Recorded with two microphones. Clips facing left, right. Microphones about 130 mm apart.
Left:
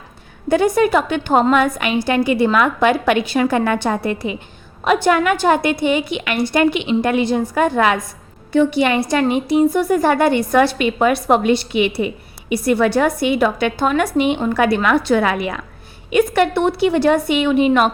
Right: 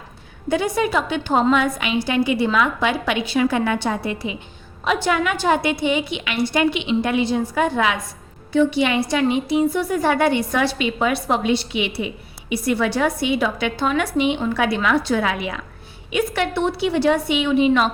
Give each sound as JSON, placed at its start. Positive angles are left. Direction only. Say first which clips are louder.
{"t": 0.4, "sound": "a woman's voice", "louder": "left 6 dB", "side_deg": 50}